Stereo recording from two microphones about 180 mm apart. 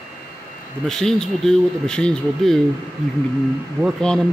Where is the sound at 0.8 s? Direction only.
Centre (ahead or behind).